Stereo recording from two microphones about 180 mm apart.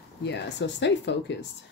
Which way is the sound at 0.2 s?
75° left (ahead or behind).